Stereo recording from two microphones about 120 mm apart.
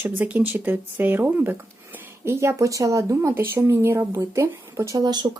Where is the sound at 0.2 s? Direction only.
15° right (ahead or behind).